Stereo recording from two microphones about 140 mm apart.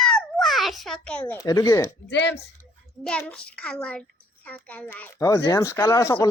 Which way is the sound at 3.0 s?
10° left (ahead or behind).